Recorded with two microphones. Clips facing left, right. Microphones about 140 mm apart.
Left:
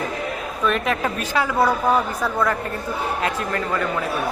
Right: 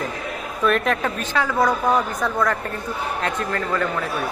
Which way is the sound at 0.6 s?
Centre (ahead or behind).